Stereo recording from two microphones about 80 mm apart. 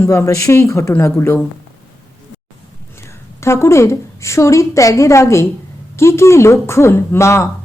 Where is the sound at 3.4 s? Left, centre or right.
Left.